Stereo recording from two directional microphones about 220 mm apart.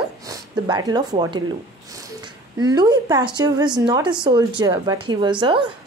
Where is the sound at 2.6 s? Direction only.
20° right (ahead or behind).